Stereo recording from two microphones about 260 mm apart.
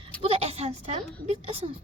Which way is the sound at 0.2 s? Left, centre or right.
Right.